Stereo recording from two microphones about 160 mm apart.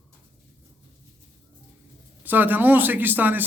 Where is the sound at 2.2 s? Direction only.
10° right (ahead or behind).